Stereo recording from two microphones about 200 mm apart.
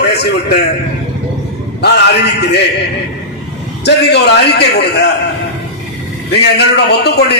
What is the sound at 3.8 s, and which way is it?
A man's voice, 55° left (ahead or behind).